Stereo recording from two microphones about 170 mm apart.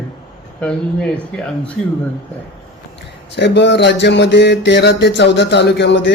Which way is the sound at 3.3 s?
90° left.